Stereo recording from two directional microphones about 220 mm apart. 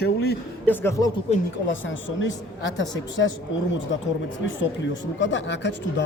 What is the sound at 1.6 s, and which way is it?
Speech, 60° left (ahead or behind).